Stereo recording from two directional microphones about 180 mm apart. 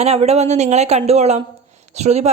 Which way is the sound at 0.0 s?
35° right (ahead or behind).